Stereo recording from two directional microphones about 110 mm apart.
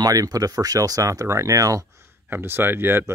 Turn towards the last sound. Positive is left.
turn(degrees=-20)  # may be behind; listen again after turning